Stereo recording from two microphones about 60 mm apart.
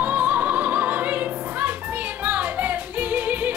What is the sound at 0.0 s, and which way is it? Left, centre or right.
Music, right.